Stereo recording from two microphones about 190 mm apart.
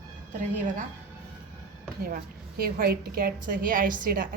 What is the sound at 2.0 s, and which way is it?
A woman's voice, 50° right (ahead or behind).